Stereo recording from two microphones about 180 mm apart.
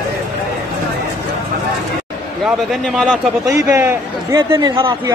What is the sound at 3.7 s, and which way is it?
A man's voice, 15° right (ahead or behind).